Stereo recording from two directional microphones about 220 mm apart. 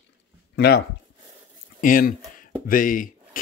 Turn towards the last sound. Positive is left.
turn(degrees=40)  # may be behind; listen again after turning